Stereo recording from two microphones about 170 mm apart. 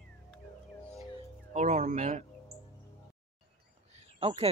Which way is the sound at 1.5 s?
45° right (ahead or behind).